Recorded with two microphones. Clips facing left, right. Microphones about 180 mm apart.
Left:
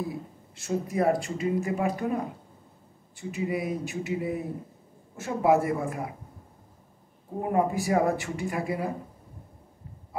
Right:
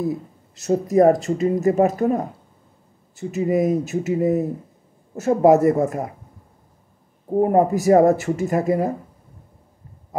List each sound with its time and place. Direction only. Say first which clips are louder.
0.0 s speech: right 9 dB; 40° right (ahead or behind)
7.4 s speech: right 8 dB; 40° right (ahead or behind)